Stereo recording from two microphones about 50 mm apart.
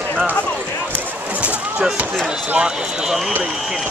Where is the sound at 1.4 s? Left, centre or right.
Right.